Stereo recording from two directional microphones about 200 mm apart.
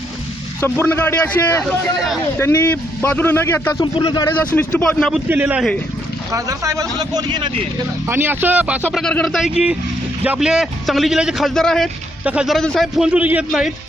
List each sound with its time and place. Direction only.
0.6 s a man's voice: 10° left (ahead or behind)
4.4 s a man's voice: 10° left (ahead or behind)
5.3 s a man's voice: 10° right (ahead or behind)